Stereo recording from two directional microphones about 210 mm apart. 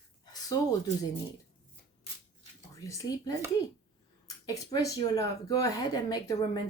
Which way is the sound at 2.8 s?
15° left (ahead or behind).